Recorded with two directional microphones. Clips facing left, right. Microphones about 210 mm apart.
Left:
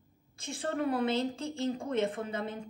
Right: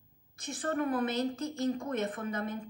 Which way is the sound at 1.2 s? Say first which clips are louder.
Right 1 dB; 30° left (ahead or behind).